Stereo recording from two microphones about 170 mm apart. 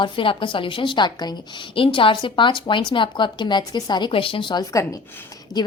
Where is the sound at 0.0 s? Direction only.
30° left (ahead or behind).